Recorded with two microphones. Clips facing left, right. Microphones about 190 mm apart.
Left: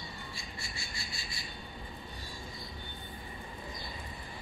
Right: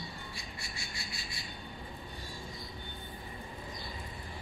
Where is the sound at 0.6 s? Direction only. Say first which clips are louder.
Even; 15° right (ahead or behind).